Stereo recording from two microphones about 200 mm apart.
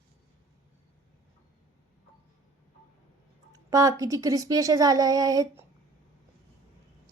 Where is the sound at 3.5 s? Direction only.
15° right (ahead or behind).